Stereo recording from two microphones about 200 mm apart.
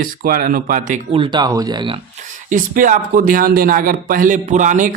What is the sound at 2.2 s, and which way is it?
Speech, 40° right (ahead or behind).